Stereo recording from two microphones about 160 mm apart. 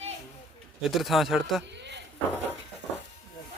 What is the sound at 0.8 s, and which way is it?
Speech, centre (ahead or behind).